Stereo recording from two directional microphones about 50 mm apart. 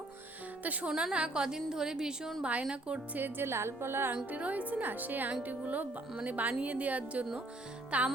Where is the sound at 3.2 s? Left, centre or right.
Right.